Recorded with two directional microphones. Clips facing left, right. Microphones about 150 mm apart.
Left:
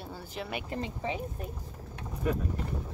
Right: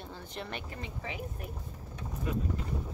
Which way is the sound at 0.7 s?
30° left (ahead or behind).